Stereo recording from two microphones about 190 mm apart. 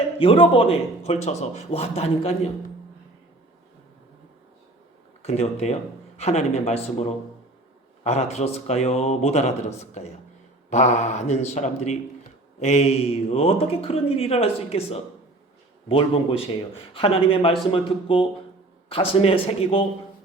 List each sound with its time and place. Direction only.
0.2 s speech: 30° left (ahead or behind)
5.2 s speech: 35° left (ahead or behind)